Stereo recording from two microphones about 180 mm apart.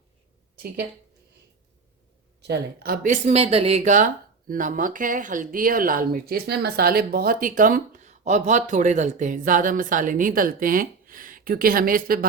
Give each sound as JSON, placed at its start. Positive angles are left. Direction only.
{"t": 2.4, "sound": "speech", "side_deg": -65}